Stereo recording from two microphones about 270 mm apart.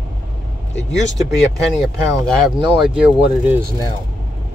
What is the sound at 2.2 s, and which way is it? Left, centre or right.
Speech, centre.